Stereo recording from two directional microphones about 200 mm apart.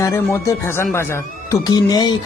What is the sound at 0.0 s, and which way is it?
Speech, 15° left (ahead or behind).